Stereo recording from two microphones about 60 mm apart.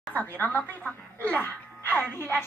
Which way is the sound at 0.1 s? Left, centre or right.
Left.